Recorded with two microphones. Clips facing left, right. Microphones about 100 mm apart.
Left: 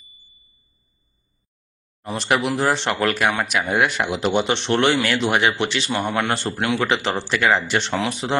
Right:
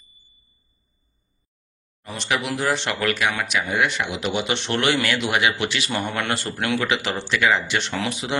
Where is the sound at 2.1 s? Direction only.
40° left (ahead or behind).